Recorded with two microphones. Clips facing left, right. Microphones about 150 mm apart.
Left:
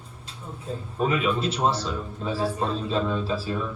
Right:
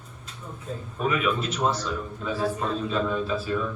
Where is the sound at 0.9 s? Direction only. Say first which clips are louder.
Left 1 dB; 30° left (ahead or behind).